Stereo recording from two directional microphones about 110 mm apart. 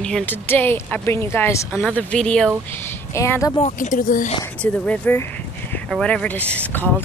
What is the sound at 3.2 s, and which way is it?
Speech, 25° left (ahead or behind).